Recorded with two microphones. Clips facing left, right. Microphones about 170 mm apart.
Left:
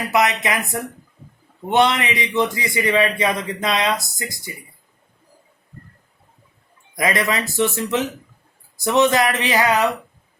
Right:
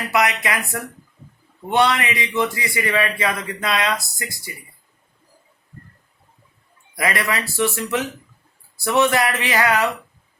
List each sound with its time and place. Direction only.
0.1 s a man's voice: 20° left (ahead or behind)
6.9 s a man's voice: 20° left (ahead or behind)